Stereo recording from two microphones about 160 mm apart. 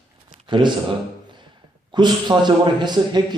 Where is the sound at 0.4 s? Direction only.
30° right (ahead or behind).